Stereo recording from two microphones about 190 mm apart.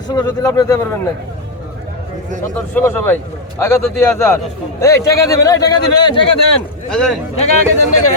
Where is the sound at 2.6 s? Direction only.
10° left (ahead or behind).